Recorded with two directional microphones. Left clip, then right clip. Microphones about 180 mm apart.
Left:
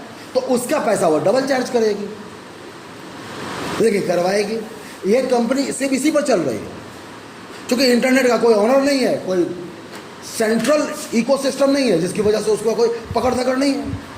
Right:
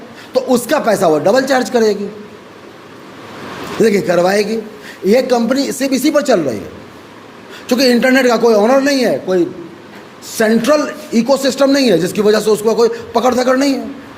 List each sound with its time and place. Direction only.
0.3 s speech: 45° right (ahead or behind)
3.8 s speech: 40° right (ahead or behind)
7.9 s a man's voice: 40° right (ahead or behind)